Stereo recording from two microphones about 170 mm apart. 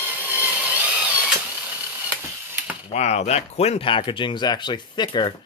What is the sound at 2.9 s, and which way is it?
Speech, 40° left (ahead or behind).